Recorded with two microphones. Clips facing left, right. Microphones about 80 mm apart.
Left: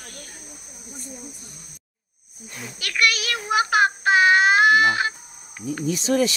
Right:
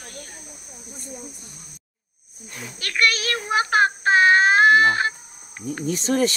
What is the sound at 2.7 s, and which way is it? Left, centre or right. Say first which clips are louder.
Child singing: right 1 dB; right.